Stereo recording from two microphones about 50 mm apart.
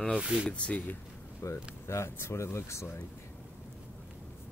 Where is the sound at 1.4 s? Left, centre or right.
Left.